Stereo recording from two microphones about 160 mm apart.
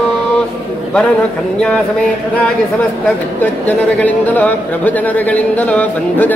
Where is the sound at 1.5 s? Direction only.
5° left (ahead or behind).